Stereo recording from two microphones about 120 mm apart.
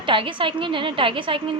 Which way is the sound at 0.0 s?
45° right (ahead or behind).